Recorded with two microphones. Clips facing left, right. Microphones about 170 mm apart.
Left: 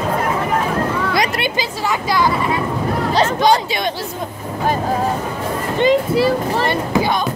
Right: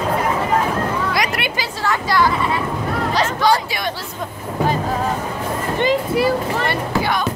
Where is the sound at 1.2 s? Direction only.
25° left (ahead or behind).